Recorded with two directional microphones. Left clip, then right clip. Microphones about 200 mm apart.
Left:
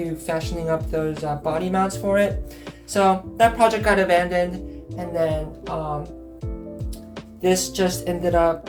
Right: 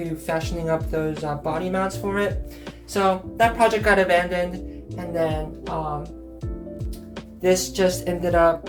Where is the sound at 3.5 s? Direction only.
5° left (ahead or behind).